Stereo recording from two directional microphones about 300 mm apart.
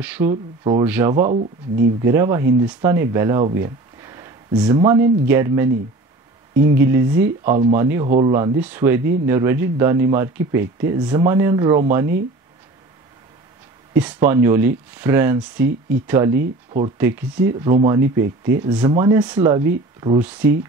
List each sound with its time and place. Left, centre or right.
0.0 s speech: centre
1.3 s speech: right
2.0 s speech: centre
13.9 s speech: centre